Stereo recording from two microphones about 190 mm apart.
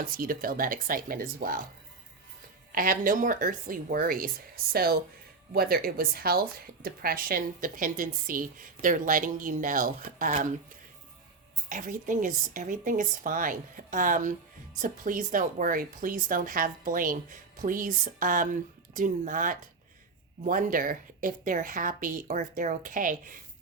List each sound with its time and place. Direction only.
0.0 s a woman's voice: 45° right (ahead or behind)
2.7 s a woman's voice: 45° right (ahead or behind)
11.7 s a woman's voice: 45° right (ahead or behind)